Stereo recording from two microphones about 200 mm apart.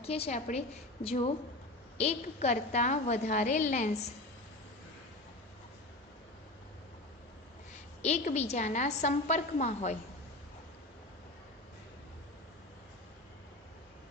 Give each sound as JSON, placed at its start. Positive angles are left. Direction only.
{"t": 0.0, "sound": "a woman's voice", "side_deg": 30}
{"t": 8.0, "sound": "a woman's voice", "side_deg": 35}